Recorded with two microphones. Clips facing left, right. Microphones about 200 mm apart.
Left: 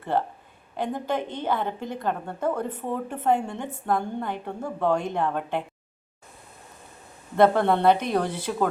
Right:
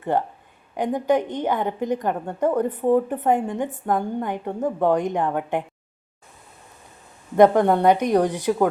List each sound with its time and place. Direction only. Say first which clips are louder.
0.8 s a woman's voice: right 7 dB; 15° right (ahead or behind)
7.3 s a woman's voice: right 4 dB; 15° right (ahead or behind)